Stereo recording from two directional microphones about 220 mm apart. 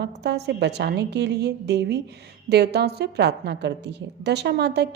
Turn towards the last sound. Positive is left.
turn(degrees=-50)  # may be behind; listen again after turning